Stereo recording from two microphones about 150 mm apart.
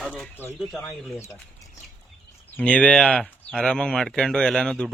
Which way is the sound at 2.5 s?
10° left (ahead or behind).